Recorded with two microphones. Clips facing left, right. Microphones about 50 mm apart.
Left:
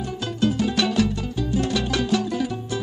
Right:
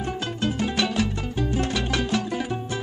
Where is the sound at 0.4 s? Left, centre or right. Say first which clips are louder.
Left 4 dB; right.